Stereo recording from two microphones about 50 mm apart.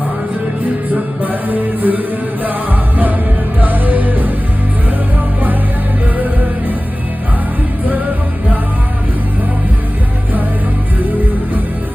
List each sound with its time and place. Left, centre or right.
1.2 s music: right
3.6 s music: right